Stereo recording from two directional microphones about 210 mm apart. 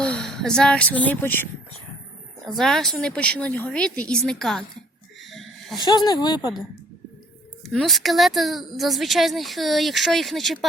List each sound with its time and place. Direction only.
0.0 s speech: 5° left (ahead or behind)
2.5 s a woman's voice: centre (ahead or behind)
5.3 s a sound: centre (ahead or behind)
5.8 s speech: 20° left (ahead or behind)
7.6 s a woman's voice: centre (ahead or behind)